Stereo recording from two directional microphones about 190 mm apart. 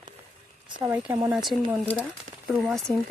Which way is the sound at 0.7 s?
15° right (ahead or behind).